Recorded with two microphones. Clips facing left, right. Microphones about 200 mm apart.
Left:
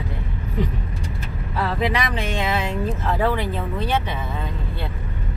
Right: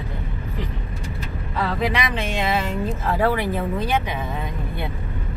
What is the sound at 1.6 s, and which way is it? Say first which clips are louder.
Speech: even; centre (ahead or behind).